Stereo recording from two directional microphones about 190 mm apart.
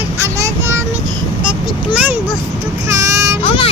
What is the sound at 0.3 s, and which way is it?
Child singing, 15° right (ahead or behind).